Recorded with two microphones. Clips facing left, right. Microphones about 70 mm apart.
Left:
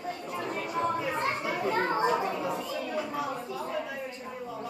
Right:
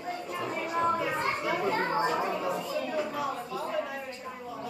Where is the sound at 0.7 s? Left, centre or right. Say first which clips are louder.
Right 2 dB; right.